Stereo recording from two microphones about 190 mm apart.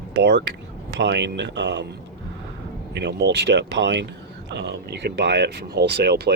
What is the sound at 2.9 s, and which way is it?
Speech, 60° right (ahead or behind).